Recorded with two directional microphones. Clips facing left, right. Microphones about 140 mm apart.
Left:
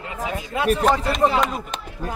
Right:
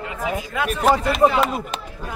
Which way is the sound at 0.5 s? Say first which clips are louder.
Left 4 dB; 30° left (ahead or behind).